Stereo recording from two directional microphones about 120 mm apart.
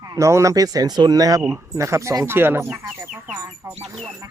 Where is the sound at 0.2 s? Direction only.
25° right (ahead or behind).